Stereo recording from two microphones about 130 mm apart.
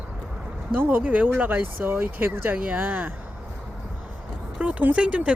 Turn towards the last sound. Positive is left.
turn(degrees=-10)  # may be behind; listen again after turning